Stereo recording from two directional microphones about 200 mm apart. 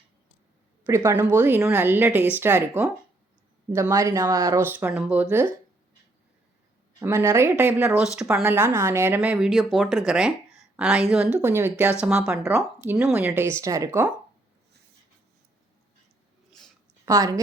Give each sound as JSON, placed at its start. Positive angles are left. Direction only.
{"t": 0.9, "sound": "speech", "side_deg": -15}
{"t": 7.0, "sound": "speech", "side_deg": -15}
{"t": 17.1, "sound": "speech", "side_deg": -15}